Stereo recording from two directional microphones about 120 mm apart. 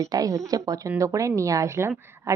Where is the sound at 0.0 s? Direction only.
30° right (ahead or behind).